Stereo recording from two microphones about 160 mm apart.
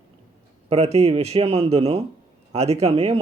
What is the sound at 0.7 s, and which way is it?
Speech, 40° right (ahead or behind).